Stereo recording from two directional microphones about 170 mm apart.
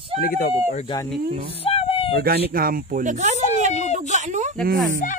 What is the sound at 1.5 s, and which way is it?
Speech, 35° left (ahead or behind).